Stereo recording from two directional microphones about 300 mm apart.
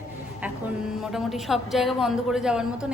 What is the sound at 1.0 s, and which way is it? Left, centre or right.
A woman's voice, centre.